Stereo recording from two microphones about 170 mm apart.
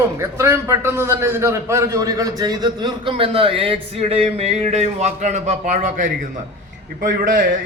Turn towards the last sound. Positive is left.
turn(degrees=-50)  # may be behind; listen again after turning